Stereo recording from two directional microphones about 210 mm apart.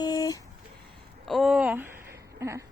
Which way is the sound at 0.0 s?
20° left (ahead or behind).